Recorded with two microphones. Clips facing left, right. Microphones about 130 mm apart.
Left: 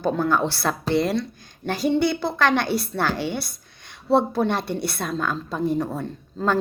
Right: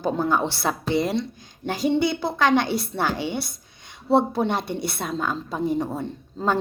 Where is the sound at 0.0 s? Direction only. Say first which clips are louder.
Left 1 dB; 20° right (ahead or behind).